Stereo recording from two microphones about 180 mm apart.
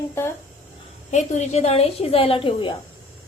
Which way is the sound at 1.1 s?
40° left (ahead or behind).